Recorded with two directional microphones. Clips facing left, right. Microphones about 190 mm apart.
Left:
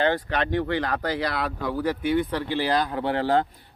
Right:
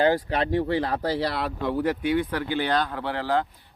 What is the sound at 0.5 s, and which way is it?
Speech, 5° right (ahead or behind).